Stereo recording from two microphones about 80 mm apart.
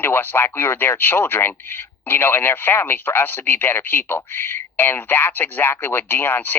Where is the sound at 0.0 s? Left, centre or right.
Left.